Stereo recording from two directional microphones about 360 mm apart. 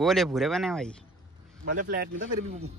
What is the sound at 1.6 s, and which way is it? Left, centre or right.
Speech, right.